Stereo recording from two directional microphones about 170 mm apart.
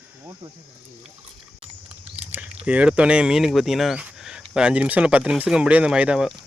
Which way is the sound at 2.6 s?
5° right (ahead or behind).